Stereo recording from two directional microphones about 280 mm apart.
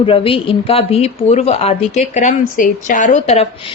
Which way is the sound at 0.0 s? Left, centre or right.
Centre.